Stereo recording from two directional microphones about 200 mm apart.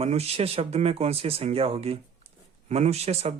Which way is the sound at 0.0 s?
30° right (ahead or behind).